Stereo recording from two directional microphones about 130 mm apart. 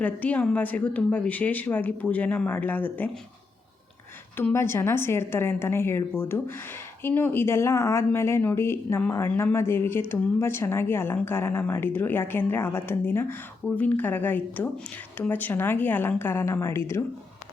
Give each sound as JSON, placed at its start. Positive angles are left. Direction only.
{"t": 0.0, "sound": "speech", "side_deg": 10}
{"t": 4.4, "sound": "speech", "side_deg": 20}